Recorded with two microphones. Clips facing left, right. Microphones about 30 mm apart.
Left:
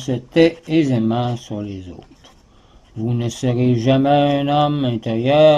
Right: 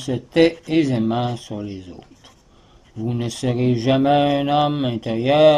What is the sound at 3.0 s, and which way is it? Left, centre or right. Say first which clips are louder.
Speech: left 2 dB; centre.